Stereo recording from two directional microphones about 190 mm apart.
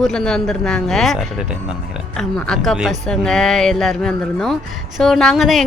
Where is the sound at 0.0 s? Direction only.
5° left (ahead or behind).